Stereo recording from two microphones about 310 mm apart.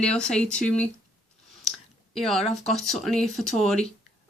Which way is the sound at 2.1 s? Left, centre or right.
Centre.